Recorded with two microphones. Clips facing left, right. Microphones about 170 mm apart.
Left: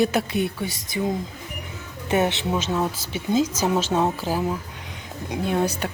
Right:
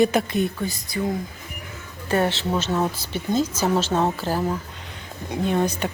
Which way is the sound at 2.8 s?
10° right (ahead or behind).